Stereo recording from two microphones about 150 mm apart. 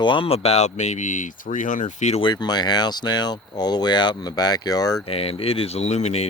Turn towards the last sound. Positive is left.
turn(degrees=45)  # may be behind; listen again after turning